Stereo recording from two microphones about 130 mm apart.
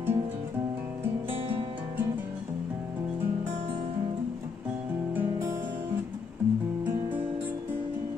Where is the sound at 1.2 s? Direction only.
45° right (ahead or behind).